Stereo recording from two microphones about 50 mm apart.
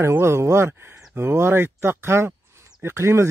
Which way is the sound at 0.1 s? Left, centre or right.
Right.